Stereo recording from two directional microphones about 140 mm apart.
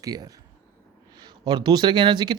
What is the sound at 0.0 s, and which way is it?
Speech, 25° right (ahead or behind).